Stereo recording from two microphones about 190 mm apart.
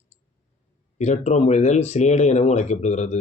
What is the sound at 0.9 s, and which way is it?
A man's voice, 35° left (ahead or behind).